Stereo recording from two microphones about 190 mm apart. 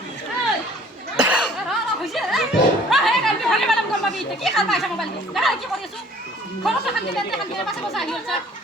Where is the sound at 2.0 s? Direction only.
Centre (ahead or behind).